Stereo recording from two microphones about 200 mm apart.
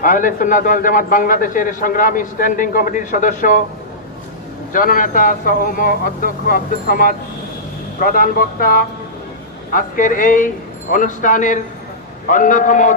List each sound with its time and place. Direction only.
0.0 s a man's voice: 40° left (ahead or behind)
4.7 s a man's voice: 45° left (ahead or behind)